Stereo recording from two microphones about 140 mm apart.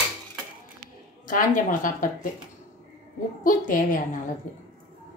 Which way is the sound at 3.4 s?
75° left (ahead or behind).